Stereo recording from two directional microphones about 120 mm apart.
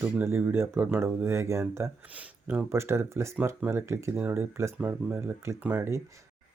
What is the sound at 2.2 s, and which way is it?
Speech, 10° right (ahead or behind).